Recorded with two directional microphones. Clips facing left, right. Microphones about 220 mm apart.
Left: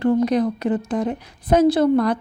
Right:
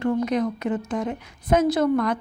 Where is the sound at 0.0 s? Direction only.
35° left (ahead or behind).